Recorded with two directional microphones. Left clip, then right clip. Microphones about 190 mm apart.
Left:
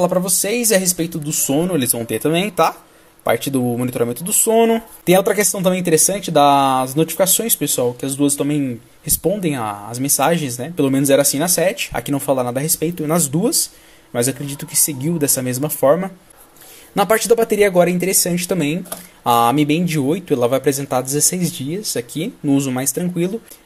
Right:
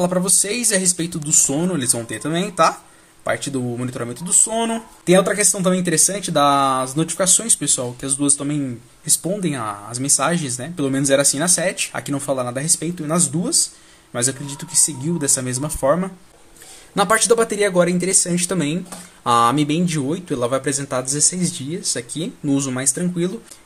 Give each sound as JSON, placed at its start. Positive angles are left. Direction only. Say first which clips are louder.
{"t": 0.0, "sound": "speech", "louder": "left 2 dB", "side_deg": 5}
{"t": 5.0, "sound": "speech", "louder": "left 1 dB", "side_deg": 15}